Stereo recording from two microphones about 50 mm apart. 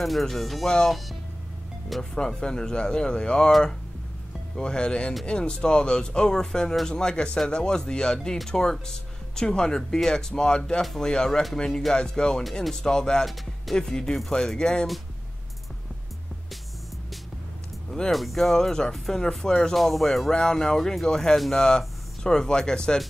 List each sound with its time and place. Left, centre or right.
0.0 s speech: centre
2.0 s speech: centre
4.6 s speech: centre
10.8 s speech: centre
11.1 s speech: centre
18.1 s speech: centre
19.7 s speech: centre